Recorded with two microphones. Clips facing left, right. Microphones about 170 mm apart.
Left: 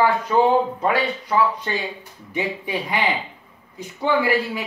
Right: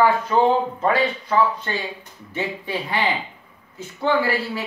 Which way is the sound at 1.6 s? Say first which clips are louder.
Left 1 dB; 15° left (ahead or behind).